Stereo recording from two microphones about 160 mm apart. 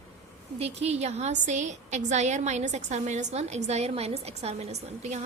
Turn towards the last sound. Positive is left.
turn(degrees=-45)  # may be behind; listen again after turning